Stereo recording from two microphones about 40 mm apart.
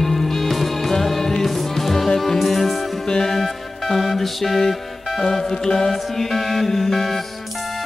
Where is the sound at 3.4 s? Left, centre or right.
Centre.